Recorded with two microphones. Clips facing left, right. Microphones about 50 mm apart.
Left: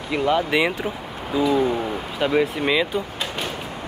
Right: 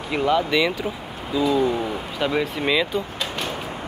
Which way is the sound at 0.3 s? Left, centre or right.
Left.